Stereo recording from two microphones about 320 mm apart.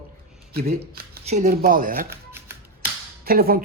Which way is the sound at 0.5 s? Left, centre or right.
Right.